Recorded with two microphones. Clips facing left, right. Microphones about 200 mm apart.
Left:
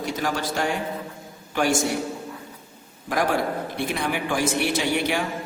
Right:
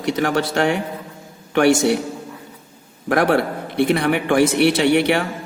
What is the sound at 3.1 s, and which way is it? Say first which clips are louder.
A man's voice: right 6 dB; 65° right (ahead or behind).